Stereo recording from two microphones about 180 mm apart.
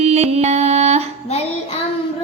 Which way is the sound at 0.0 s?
35° right (ahead or behind).